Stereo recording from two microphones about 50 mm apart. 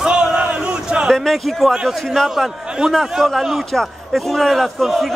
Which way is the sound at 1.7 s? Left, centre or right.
Centre.